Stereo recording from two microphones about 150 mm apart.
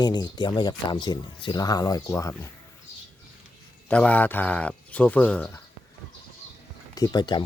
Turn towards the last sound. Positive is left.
turn(degrees=30)  # may be behind; listen again after turning